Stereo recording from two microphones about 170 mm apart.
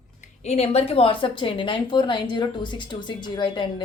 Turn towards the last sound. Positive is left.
turn(degrees=30)  # may be behind; listen again after turning